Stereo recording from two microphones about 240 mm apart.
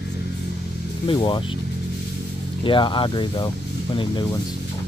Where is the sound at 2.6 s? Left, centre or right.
Centre.